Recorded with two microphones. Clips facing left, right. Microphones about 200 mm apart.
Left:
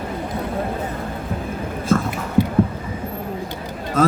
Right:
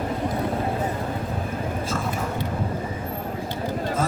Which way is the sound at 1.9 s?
55° left (ahead or behind).